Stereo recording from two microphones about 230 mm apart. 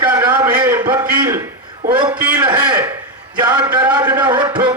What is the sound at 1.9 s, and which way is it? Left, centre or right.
A man's voice, centre.